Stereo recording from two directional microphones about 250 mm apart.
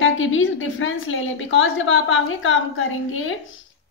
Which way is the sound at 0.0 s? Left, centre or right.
Left.